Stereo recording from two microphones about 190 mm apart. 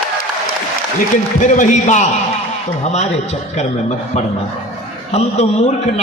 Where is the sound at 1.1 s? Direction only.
40° left (ahead or behind).